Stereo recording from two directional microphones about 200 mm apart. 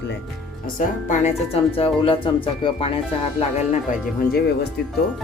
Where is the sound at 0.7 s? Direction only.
35° left (ahead or behind).